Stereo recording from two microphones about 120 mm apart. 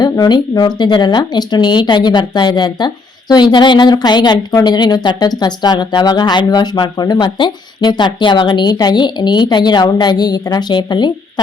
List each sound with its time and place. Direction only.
0.0 s speech: 35° left (ahead or behind)